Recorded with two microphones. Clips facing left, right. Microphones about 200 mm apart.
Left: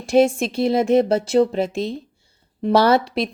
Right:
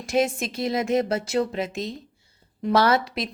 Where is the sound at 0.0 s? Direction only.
30° left (ahead or behind).